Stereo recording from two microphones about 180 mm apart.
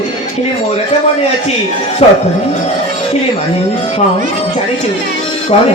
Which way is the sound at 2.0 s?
35° left (ahead or behind).